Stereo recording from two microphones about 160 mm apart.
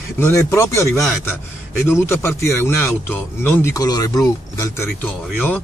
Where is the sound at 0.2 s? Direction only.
20° left (ahead or behind).